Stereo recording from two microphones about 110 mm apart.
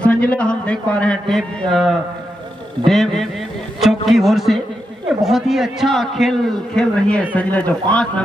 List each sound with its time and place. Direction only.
0.0 s a man's voice: 10° left (ahead or behind)